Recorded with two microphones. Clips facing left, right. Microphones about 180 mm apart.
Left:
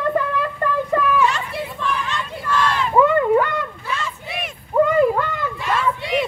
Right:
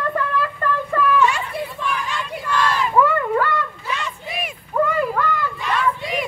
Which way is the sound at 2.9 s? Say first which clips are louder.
Left 5 dB; 20° left (ahead or behind).